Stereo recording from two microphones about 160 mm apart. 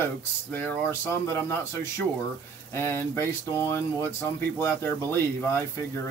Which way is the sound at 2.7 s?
15° left (ahead or behind).